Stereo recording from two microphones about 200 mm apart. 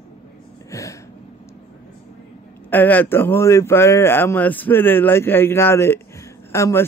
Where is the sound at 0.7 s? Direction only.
15° left (ahead or behind).